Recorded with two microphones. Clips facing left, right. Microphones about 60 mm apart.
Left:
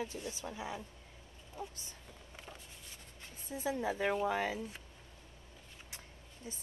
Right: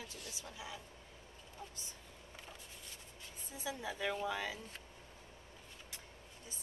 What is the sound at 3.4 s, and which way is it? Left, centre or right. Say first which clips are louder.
A woman's voice: left 7 dB; left.